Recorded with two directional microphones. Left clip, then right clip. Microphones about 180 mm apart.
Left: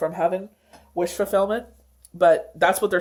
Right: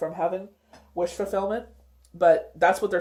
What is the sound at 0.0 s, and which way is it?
Speech, 40° left (ahead or behind).